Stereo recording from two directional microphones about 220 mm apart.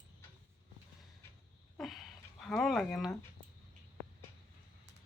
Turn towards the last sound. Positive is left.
turn(degrees=0)  # may be behind; listen again after turning